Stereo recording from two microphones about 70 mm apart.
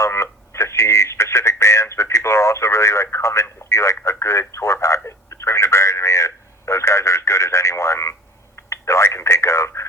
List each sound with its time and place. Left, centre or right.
0.0 s radio: left
4.0 s speech: left
5.0 s a sound: left
8.5 s telephone: left